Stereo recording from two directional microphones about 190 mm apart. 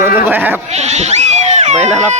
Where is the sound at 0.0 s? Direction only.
10° right (ahead or behind).